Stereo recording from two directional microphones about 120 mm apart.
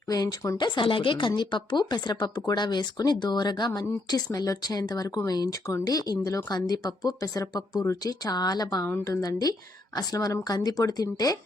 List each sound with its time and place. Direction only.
0.1 s speech: 30° left (ahead or behind)
0.6 s speech: 45° left (ahead or behind)